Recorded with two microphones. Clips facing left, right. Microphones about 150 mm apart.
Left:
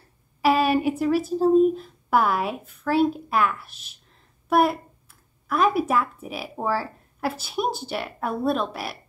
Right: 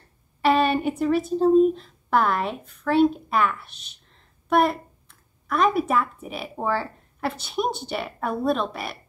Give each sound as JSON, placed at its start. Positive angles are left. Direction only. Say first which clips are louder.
{"t": 0.4, "sound": "speech", "louder": "even", "side_deg": 5}